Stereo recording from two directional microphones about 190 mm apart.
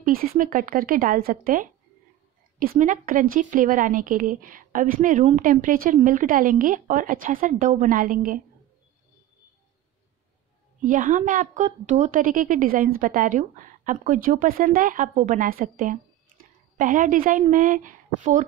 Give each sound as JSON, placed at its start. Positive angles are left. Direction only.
{"t": 0.0, "sound": "a woman's voice", "side_deg": -50}
{"t": 10.8, "sound": "a woman's voice", "side_deg": -45}